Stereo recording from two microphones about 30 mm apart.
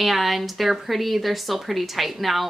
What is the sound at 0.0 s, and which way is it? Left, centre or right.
Speech, centre.